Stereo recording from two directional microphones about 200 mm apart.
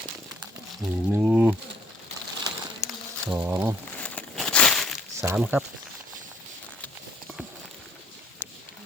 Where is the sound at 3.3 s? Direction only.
10° right (ahead or behind).